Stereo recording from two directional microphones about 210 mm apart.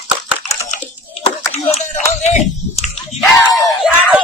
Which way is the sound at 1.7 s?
35° left (ahead or behind).